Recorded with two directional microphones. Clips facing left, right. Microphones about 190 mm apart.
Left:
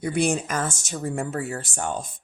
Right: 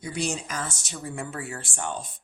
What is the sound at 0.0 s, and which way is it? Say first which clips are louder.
Speech: left 7 dB; 55° left (ahead or behind).